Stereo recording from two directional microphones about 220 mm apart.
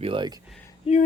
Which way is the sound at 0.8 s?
30° left (ahead or behind).